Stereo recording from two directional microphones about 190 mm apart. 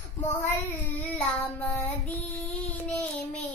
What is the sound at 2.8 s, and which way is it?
Child singing, 5° left (ahead or behind).